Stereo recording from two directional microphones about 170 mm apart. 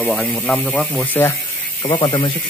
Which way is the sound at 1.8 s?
30° left (ahead or behind).